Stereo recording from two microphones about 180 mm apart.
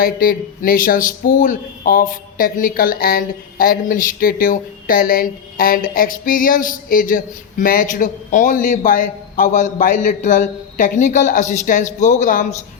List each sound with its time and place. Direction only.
0.0 s a man's voice: 50° left (ahead or behind)